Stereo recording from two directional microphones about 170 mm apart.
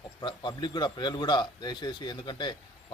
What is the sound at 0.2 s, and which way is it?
Speech, 25° left (ahead or behind).